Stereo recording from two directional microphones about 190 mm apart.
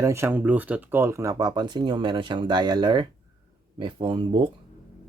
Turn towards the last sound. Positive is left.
turn(degrees=-25)  # may be behind; listen again after turning